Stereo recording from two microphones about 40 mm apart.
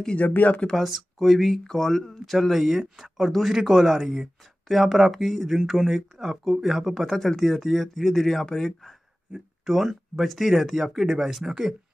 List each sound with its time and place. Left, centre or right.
0.3 s speech: left
0.7 s speech: centre
9.3 s speech: centre